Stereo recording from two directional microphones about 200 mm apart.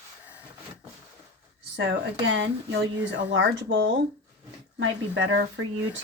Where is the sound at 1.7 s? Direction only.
60° right (ahead or behind).